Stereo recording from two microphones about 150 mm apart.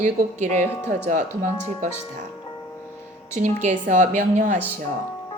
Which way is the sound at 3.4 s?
55° right (ahead or behind).